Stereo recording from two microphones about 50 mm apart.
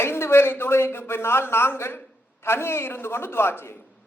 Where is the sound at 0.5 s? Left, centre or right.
Left.